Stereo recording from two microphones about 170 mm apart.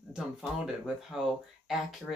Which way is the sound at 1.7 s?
Centre (ahead or behind).